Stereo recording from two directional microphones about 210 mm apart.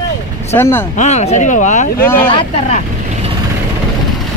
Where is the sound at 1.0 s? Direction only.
35° left (ahead or behind).